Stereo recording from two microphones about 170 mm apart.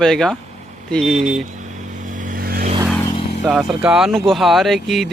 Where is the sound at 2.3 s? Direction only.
60° right (ahead or behind).